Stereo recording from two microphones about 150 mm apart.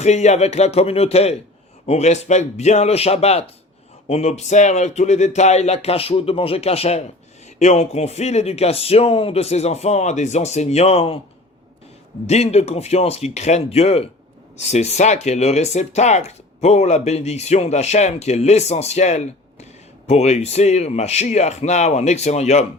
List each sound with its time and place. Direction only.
0.0 s speech: 50° left (ahead or behind)
12.2 s speech: 45° left (ahead or behind)